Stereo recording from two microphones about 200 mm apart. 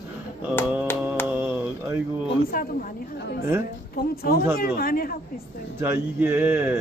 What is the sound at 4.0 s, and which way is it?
Speech, 50° left (ahead or behind).